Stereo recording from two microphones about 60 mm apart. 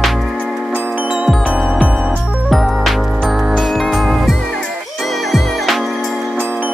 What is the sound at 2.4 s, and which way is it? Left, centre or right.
Music, centre.